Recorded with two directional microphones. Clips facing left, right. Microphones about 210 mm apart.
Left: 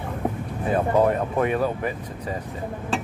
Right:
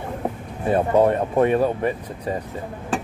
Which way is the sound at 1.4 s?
35° right (ahead or behind).